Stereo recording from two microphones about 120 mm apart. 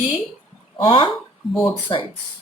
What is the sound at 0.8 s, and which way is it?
Speech, 40° left (ahead or behind).